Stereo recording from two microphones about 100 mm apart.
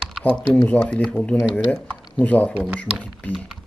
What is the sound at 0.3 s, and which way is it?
Speech, 10° left (ahead or behind).